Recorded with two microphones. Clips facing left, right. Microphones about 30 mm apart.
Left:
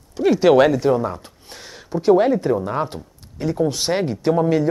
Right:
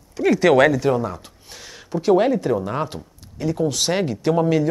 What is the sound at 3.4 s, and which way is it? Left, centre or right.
Speech, left.